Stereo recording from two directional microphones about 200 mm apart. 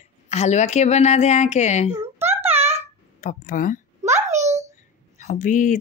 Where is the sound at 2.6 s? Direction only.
30° right (ahead or behind).